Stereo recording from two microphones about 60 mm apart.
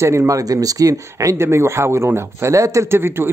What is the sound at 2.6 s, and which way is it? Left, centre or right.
Speech, right.